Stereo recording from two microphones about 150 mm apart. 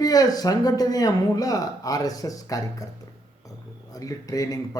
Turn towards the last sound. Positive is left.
turn(degrees=25)  # may be behind; listen again after turning